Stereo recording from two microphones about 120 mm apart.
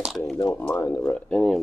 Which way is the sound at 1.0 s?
10° left (ahead or behind).